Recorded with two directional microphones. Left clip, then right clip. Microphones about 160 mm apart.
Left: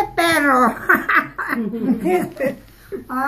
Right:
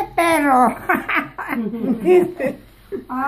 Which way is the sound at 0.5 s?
30° right (ahead or behind).